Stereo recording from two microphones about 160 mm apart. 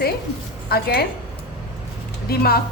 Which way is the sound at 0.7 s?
75° left (ahead or behind).